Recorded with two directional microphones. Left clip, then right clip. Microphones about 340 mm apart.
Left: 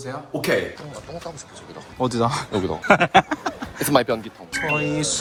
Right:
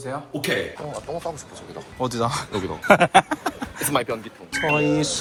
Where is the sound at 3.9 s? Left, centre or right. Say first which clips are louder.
Left 5 dB; left.